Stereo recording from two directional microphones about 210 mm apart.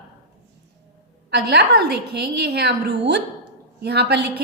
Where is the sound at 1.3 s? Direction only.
50° right (ahead or behind).